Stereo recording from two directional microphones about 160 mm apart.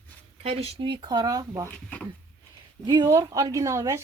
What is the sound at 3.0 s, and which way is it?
A woman's voice, 20° right (ahead or behind).